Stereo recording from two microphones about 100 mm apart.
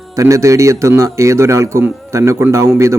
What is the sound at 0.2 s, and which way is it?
A man's voice, 30° right (ahead or behind).